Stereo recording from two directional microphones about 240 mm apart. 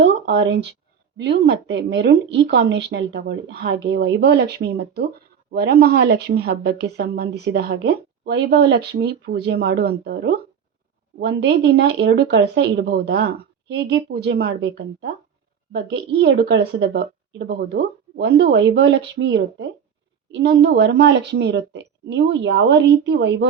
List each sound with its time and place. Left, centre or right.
0.0 s a woman's voice: right